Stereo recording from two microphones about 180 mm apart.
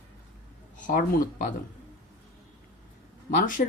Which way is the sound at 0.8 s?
50° left (ahead or behind).